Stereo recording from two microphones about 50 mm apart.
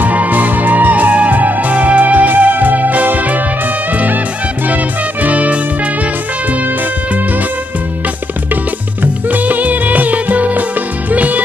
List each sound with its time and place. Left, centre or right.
0.0 s music: right
5.2 s music: right
9.0 s music: right